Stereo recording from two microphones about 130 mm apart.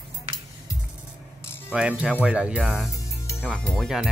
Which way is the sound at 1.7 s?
10° right (ahead or behind).